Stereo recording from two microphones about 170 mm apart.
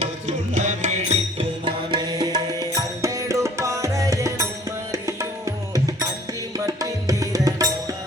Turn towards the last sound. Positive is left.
turn(degrees=-20)  # may be behind; listen again after turning